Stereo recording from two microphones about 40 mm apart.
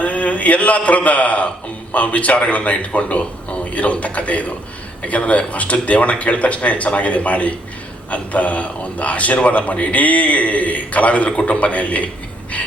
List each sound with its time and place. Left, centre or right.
0.0 s a man's voice: left